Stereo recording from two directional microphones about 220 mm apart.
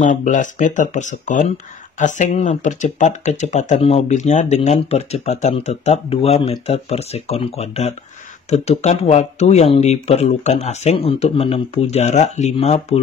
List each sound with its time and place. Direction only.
0.0 s speech: 35° left (ahead or behind)